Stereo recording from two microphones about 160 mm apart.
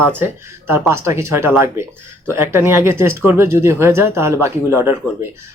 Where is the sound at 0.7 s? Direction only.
15° right (ahead or behind).